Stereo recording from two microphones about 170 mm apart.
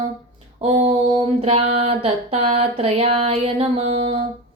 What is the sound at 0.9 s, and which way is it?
Mantra, 35° right (ahead or behind).